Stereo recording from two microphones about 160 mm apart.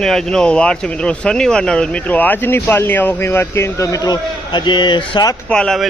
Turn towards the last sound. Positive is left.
turn(degrees=5)  # may be behind; listen again after turning